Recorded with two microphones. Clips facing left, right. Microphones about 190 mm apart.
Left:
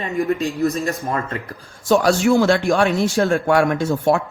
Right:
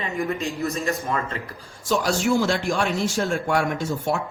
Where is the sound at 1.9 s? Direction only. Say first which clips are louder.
Left 6 dB; 65° left (ahead or behind).